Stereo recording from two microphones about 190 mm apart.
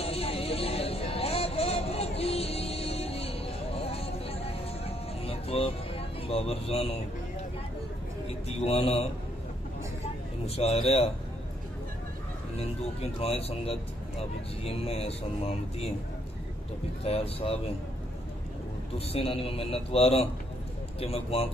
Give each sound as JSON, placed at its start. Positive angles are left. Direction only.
{"t": 0.0, "sound": "a sound", "side_deg": 30}
{"t": 8.3, "sound": "a man's voice", "side_deg": 30}
{"t": 10.4, "sound": "speech", "side_deg": 30}
{"t": 13.2, "sound": "speech", "side_deg": 30}
{"t": 17.0, "sound": "speech", "side_deg": 30}
{"t": 18.9, "sound": "speech", "side_deg": 30}